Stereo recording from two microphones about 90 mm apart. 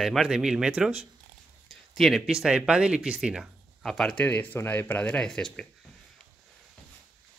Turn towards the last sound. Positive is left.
turn(degrees=10)  # may be behind; listen again after turning